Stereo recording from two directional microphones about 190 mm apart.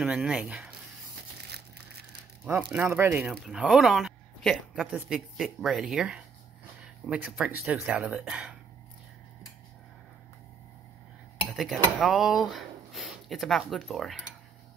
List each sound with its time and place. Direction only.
0.0 s speech: 5° right (ahead or behind)
2.7 s speech: 10° right (ahead or behind)
11.4 s speech: centre (ahead or behind)